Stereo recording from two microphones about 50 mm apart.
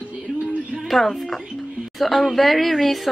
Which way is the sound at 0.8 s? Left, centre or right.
Centre.